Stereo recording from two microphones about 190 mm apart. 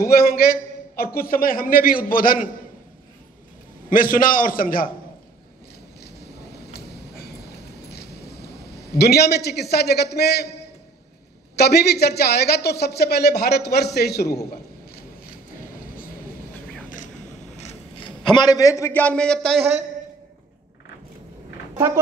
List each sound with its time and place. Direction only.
0.0 s a man's voice: 55° left (ahead or behind)
3.9 s a man's voice: 45° left (ahead or behind)
7.9 s a sound: 60° left (ahead or behind)
8.9 s a man's voice: 55° left (ahead or behind)
11.5 s speech: 60° left (ahead or behind)
17.6 s a man's voice: 30° left (ahead or behind); by 19.6 s 5° left (ahead or behind)